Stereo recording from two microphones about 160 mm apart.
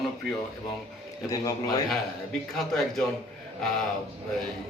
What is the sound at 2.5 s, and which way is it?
Speech, centre (ahead or behind).